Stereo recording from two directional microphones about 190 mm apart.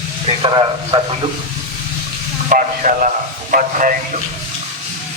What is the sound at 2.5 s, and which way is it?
A man's voice, 45° right (ahead or behind).